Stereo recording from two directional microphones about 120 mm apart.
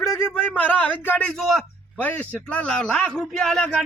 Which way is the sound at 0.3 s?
15° left (ahead or behind).